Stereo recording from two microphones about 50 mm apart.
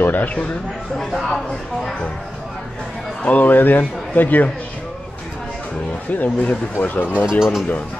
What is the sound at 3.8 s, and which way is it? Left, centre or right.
Speech, left.